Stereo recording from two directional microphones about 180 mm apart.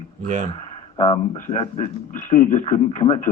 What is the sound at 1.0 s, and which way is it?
A man's voice, 40° left (ahead or behind).